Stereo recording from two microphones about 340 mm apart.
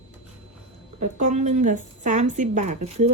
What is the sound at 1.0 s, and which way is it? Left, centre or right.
Speech, right.